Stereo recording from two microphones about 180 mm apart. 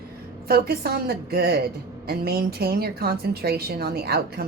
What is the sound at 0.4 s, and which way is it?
A woman's voice, 60° right (ahead or behind).